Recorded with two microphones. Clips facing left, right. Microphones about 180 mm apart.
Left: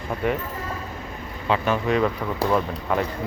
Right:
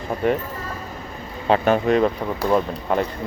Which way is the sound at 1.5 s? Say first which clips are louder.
Right 5 dB; 50° right (ahead or behind).